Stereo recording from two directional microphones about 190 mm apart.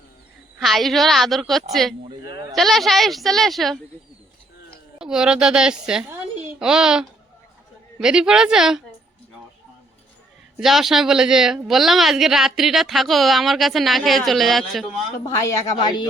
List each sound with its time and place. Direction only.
0.6 s a woman's voice: centre (ahead or behind)
2.0 s bleat: 20° right (ahead or behind)
2.6 s a woman's voice: centre (ahead or behind)
4.9 s a child's voice: 5° right (ahead or behind)
10.6 s a woman's voice: centre (ahead or behind)
15.4 s a woman's voice: 15° left (ahead or behind)